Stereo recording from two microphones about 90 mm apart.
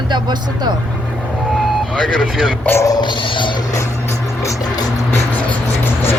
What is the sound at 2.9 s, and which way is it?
Music, 55° left (ahead or behind).